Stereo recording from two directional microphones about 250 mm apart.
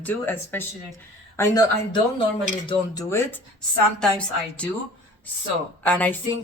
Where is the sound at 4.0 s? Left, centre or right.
Centre.